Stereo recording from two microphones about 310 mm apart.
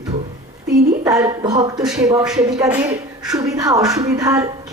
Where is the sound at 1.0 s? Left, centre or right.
Centre.